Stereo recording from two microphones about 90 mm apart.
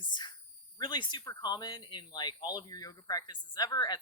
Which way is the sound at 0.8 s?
60° left (ahead or behind).